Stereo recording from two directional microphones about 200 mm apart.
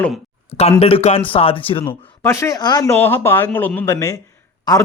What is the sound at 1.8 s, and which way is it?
A man's voice, 15° left (ahead or behind).